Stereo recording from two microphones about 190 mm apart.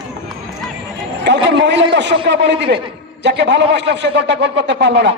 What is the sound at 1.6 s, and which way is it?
Speech, 65° right (ahead or behind).